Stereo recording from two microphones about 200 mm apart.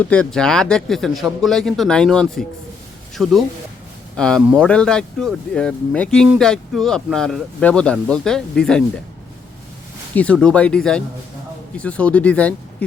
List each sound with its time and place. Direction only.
0.0 s speech: 5° left (ahead or behind)
4.2 s speech: 5° left (ahead or behind)
10.2 s speech: 5° left (ahead or behind)